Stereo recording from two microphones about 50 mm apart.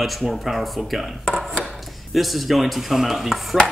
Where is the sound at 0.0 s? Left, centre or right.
Centre.